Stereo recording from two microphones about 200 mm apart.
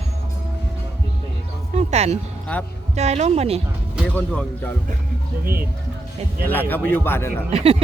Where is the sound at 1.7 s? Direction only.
35° right (ahead or behind).